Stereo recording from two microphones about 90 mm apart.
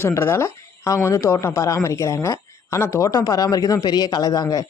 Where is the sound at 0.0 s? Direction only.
30° left (ahead or behind).